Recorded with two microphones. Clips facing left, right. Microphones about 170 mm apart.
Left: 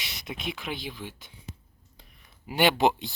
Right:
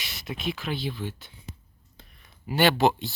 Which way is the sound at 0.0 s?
20° left (ahead or behind).